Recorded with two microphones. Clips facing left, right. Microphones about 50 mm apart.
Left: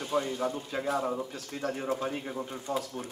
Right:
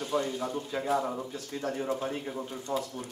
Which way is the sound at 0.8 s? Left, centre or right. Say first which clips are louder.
Even; centre.